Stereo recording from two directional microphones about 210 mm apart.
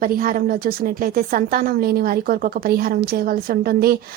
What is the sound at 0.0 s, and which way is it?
A woman's voice, 45° right (ahead or behind).